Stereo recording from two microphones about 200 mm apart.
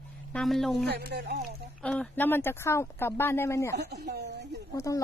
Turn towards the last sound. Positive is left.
turn(degrees=15)  # may be behind; listen again after turning